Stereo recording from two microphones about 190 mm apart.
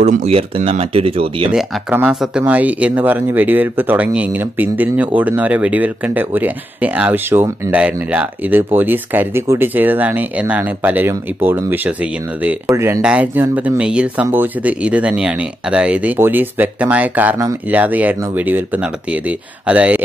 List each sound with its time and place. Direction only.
0.0 s speech: 35° right (ahead or behind)
1.5 s speech: 5° right (ahead or behind)